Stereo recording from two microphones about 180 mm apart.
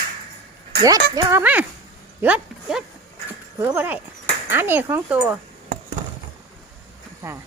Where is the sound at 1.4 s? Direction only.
10° right (ahead or behind).